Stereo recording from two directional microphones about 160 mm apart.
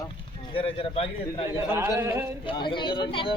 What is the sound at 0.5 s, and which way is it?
Speech, 35° left (ahead or behind).